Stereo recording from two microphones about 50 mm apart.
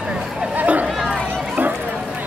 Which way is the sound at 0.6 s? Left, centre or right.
Right.